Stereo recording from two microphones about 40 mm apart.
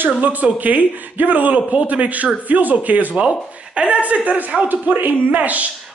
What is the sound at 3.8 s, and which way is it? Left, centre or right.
Speech, right.